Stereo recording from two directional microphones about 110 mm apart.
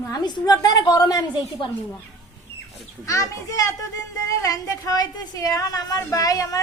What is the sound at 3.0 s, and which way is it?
A woman's voice, 30° left (ahead or behind).